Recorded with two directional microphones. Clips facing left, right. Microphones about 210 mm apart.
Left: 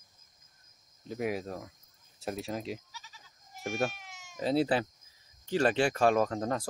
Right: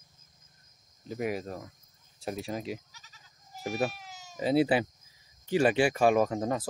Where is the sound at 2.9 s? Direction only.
45° right (ahead or behind).